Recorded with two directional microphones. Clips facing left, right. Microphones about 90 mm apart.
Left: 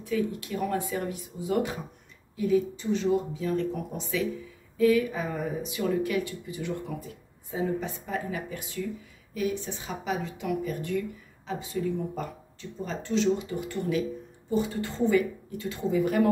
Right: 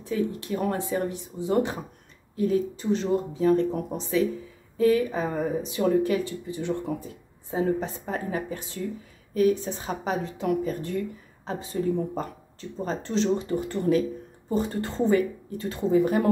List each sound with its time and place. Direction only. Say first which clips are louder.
0.0 s a woman's voice: right 1 dB; 35° right (ahead or behind)